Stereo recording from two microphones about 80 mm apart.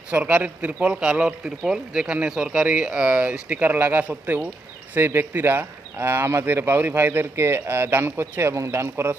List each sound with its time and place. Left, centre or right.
0.1 s speech: centre